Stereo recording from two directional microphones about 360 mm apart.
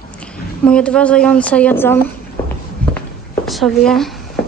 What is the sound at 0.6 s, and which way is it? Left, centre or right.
A woman's voice, centre.